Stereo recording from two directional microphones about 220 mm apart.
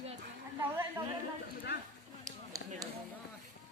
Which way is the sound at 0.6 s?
10° right (ahead or behind).